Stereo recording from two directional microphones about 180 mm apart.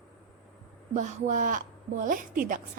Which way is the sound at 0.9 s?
40° right (ahead or behind).